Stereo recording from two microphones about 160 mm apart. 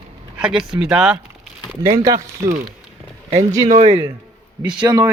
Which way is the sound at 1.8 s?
20° right (ahead or behind).